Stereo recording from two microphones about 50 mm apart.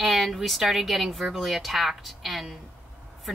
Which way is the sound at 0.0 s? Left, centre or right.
Centre.